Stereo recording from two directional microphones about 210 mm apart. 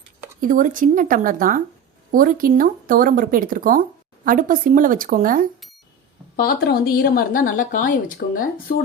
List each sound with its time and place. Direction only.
0.4 s speech: 40° right (ahead or behind)
6.3 s a woman's voice: 45° left (ahead or behind)